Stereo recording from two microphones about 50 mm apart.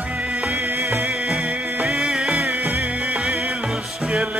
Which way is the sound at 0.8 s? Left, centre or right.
Right.